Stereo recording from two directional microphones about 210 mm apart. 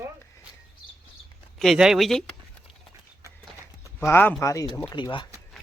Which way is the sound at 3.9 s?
10° left (ahead or behind).